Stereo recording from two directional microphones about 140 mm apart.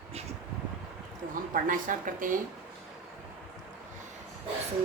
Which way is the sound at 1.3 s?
70° right (ahead or behind).